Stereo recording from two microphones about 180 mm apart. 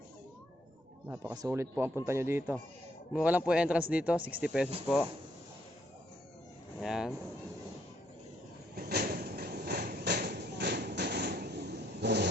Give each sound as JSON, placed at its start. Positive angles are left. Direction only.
{"t": 1.0, "sound": "speech", "side_deg": -15}
{"t": 6.7, "sound": "speech", "side_deg": 0}
{"t": 8.7, "sound": "a sound", "side_deg": -60}